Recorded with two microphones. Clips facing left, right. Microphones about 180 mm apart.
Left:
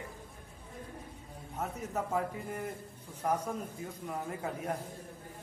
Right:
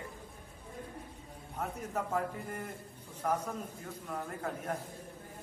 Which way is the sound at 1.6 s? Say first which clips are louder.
Left 1 dB; 5° left (ahead or behind).